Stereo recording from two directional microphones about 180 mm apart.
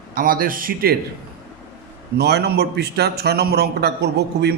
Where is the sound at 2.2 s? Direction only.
65° right (ahead or behind).